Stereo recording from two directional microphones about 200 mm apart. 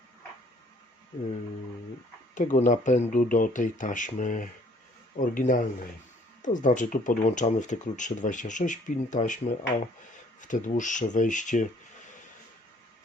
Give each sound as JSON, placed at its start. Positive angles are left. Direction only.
{"t": 2.3, "sound": "speech", "side_deg": 40}
{"t": 10.4, "sound": "speech", "side_deg": 40}